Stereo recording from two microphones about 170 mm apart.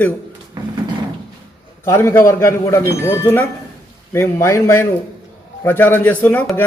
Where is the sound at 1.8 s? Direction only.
15° left (ahead or behind).